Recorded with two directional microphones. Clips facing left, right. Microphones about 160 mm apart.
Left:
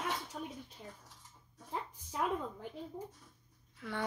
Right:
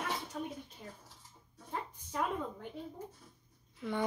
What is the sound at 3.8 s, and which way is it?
Speech, 20° right (ahead or behind).